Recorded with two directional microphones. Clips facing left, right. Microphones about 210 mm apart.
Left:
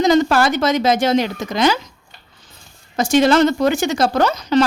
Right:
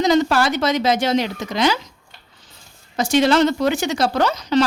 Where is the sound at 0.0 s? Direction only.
50° left (ahead or behind).